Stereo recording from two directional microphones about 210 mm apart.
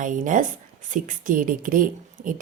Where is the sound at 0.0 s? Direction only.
40° right (ahead or behind).